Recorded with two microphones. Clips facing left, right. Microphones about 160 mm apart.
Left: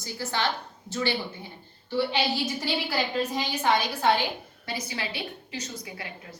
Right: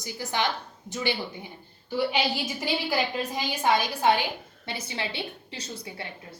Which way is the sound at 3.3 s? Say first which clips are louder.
Right 2 dB; 15° right (ahead or behind).